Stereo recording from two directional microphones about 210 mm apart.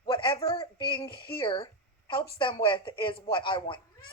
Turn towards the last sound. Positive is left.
turn(degrees=25)  # may be behind; listen again after turning